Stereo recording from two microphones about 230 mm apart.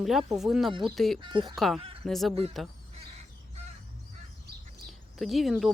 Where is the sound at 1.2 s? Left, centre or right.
Right.